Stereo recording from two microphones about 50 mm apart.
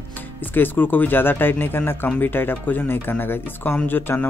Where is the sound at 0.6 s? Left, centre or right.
Left.